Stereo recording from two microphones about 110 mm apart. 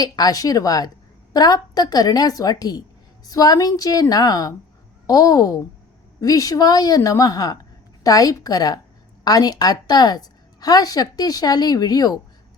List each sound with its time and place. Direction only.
0.0 s a woman's voice: 35° left (ahead or behind)